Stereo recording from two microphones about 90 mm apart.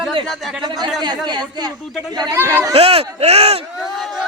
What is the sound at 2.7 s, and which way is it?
Speech, 90° right.